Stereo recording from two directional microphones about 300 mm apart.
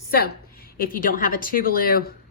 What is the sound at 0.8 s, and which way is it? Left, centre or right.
A woman's voice, left.